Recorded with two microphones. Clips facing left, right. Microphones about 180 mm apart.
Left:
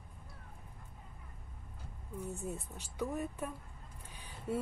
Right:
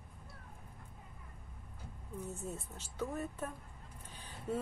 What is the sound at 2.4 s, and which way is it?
Speech, 15° left (ahead or behind).